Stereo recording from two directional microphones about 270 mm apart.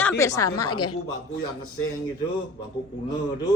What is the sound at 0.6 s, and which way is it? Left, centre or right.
Speech, left.